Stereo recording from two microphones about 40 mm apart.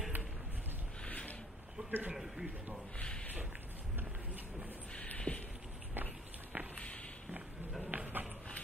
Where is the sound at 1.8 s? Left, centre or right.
Right.